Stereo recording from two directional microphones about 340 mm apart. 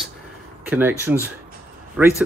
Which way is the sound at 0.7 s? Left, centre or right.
Centre.